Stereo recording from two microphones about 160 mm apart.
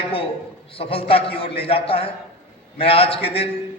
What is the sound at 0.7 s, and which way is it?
A man's voice, 35° left (ahead or behind).